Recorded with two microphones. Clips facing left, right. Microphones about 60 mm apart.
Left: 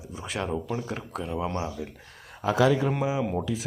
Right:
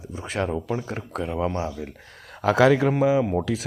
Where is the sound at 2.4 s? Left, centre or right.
Right.